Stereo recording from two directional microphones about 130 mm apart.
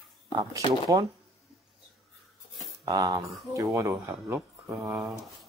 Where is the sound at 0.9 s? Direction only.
40° right (ahead or behind).